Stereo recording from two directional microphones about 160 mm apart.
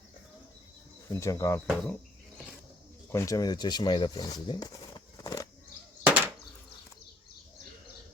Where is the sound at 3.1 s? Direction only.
20° left (ahead or behind).